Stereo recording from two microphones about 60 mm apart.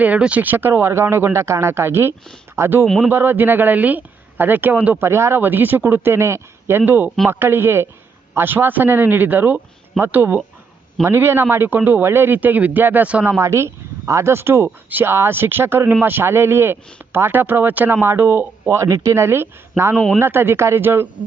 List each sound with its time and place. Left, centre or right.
0.0 s a man's voice: right
2.8 s a man's voice: centre
3.1 s a man's voice: right
4.9 s speech: right
5.4 s a man's voice: right
11.0 s a man's voice: right
12.4 s speech: right
13.4 s speech: right
14.8 s speech: right
15.1 s a man's voice: right
18.9 s speech: right
19.1 s a man's voice: right